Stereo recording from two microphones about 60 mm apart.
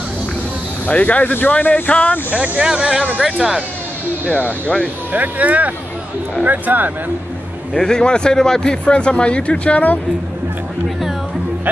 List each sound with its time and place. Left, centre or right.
0.8 s speech: left
2.3 s speech: right
4.3 s speech: left
5.1 s speech: right
7.7 s a man's voice: centre